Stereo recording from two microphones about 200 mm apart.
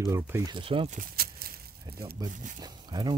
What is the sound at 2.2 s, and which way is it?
Speech, 20° right (ahead or behind).